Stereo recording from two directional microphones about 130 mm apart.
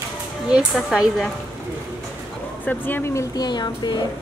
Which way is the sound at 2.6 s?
15° left (ahead or behind).